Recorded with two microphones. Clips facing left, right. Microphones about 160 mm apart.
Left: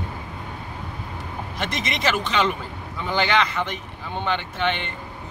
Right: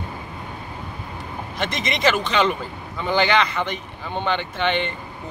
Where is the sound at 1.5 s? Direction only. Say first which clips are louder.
Right 3 dB; 5° left (ahead or behind).